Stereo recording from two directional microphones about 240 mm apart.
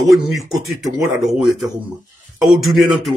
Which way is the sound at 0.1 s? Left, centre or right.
Centre.